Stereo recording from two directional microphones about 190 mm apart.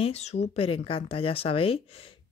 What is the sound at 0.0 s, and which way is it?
Speech, 35° left (ahead or behind).